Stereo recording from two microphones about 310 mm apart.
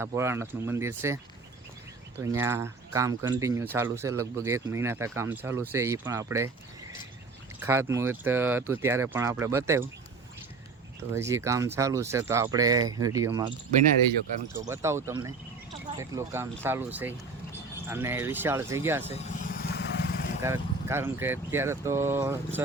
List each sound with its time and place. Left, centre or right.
0.0 s speech: centre
2.2 s speech: centre
7.6 s speech: centre
11.1 s speech: centre
14.7 s speech: centre
19.1 s vehicle: left
20.4 s speech: centre